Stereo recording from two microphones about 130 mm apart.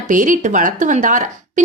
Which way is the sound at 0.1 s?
80° right.